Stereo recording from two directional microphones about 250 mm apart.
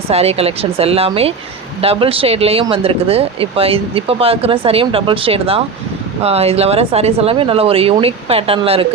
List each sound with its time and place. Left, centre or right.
0.1 s speech: right